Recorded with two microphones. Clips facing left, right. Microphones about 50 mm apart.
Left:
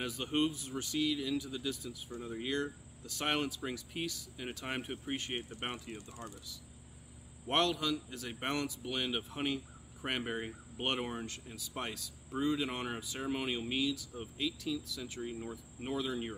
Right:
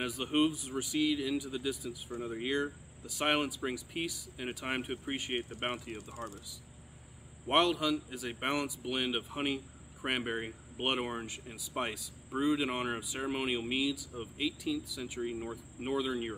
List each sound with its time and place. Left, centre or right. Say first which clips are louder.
0.0 s speech: right 3 dB; centre
7.4 s speech: right 3 dB; centre